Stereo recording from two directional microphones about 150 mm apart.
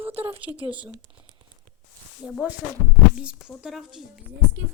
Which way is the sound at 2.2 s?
5° right (ahead or behind).